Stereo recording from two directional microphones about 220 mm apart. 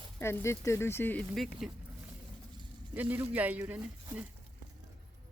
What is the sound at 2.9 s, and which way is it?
Speech, 10° right (ahead or behind).